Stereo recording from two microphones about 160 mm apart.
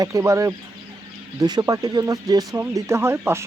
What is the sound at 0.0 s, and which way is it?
Speech, 20° right (ahead or behind).